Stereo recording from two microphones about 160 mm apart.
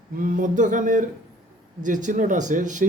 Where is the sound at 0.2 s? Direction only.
60° right (ahead or behind).